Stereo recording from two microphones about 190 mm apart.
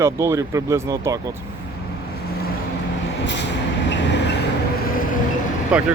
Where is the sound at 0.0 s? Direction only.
15° right (ahead or behind).